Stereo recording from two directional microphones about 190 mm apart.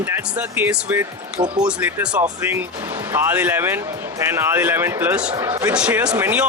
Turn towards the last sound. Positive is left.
turn(degrees=-10)  # may be behind; listen again after turning